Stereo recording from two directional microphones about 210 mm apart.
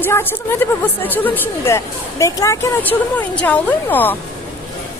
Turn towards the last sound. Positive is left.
turn(degrees=10)  # may be behind; listen again after turning